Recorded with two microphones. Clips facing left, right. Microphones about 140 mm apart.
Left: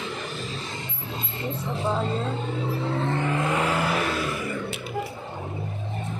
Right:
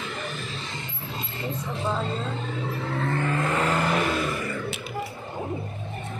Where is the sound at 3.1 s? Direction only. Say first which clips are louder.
Right 2 dB; 10° left (ahead or behind).